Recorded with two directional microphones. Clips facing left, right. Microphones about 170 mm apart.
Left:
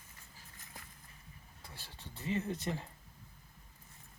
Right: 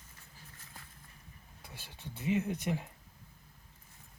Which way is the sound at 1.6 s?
20° right (ahead or behind).